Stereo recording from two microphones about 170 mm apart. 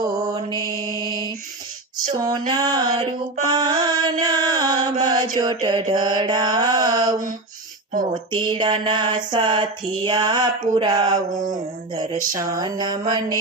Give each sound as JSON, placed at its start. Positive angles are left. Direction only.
{"t": 0.0, "sound": "mantra", "side_deg": -25}
{"t": 2.5, "sound": "music", "side_deg": -25}
{"t": 8.3, "sound": "mantra", "side_deg": -25}
{"t": 12.3, "sound": "mantra", "side_deg": -20}